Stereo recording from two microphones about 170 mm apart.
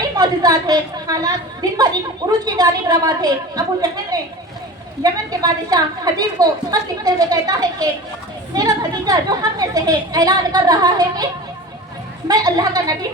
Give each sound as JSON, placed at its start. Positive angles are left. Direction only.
{"t": 0.0, "sound": "a woman's voice", "side_deg": -20}
{"t": 2.4, "sound": "a woman's voice", "side_deg": -25}
{"t": 12.3, "sound": "a woman's voice", "side_deg": -20}